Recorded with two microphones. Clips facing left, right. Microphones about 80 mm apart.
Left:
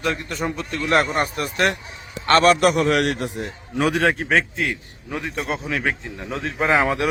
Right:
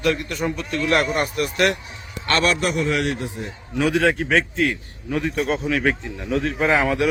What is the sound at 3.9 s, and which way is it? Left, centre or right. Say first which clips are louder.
A man's voice: right 1 dB; left.